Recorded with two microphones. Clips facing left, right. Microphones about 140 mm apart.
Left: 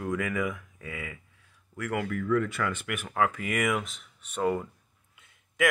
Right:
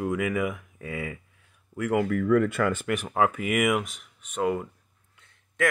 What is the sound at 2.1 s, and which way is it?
Speech, 50° right (ahead or behind).